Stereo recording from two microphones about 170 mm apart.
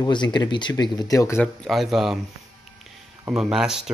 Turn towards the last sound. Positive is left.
turn(degrees=-5)  # may be behind; listen again after turning